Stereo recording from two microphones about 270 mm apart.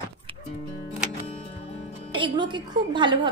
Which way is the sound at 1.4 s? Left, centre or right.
Left.